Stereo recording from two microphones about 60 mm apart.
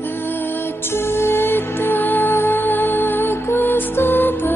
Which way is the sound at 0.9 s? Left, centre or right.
Left.